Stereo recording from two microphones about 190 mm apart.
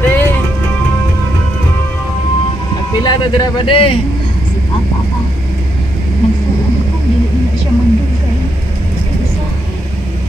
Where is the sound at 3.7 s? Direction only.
30° left (ahead or behind).